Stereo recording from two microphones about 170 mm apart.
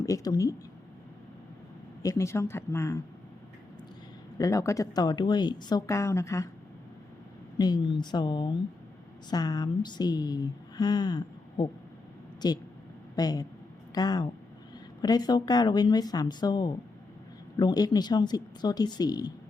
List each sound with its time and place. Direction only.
0.0 s speech: 20° left (ahead or behind)
2.0 s speech: 20° left (ahead or behind)
4.4 s speech: 20° left (ahead or behind)
7.6 s speech: 25° left (ahead or behind)